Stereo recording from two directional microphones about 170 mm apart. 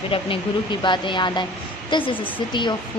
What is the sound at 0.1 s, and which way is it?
Speech, 30° left (ahead or behind).